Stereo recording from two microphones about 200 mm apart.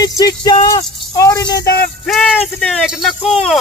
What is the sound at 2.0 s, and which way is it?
Speech, centre (ahead or behind).